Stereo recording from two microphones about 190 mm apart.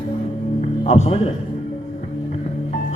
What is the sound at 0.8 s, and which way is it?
Speech, 35° left (ahead or behind).